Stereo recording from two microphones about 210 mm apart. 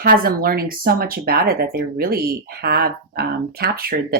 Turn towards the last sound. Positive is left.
turn(degrees=-45)  # may be behind; listen again after turning